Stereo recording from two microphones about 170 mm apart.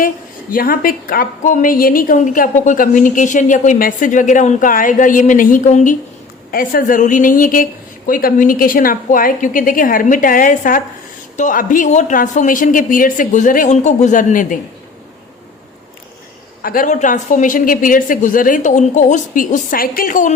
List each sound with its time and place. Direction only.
0.5 s a woman's voice: 60° left (ahead or behind)
6.5 s a woman's voice: 55° left (ahead or behind)
16.6 s a woman's voice: 50° left (ahead or behind)